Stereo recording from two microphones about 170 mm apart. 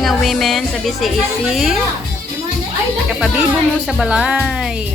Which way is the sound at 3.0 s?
5° right (ahead or behind).